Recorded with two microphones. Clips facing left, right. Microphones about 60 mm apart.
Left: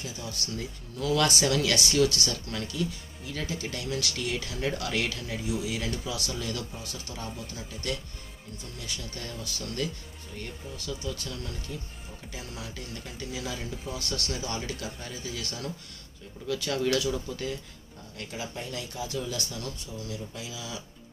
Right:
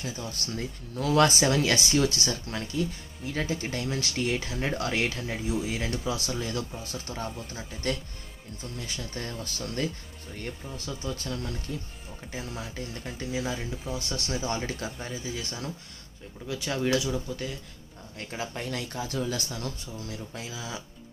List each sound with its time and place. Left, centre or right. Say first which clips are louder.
0.0 s speech: right 2 dB; right
1.4 s speech: right 2 dB; right
13.5 s speech: right 2 dB; centre
15.0 s speech: right 2 dB; centre
18.1 s speech: right 2 dB; right
18.5 s speech: right 3 dB; right
19.3 s speech: right 2 dB; right